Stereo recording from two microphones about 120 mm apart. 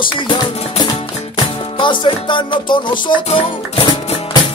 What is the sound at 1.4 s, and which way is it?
Music, 45° left (ahead or behind).